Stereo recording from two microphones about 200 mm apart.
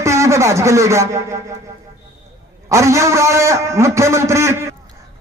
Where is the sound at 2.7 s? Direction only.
15° right (ahead or behind).